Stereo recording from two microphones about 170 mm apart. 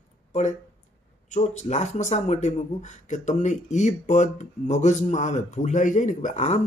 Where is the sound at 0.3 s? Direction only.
45° left (ahead or behind).